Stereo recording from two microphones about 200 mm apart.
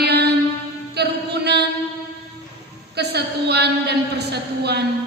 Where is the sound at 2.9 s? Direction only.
55° right (ahead or behind).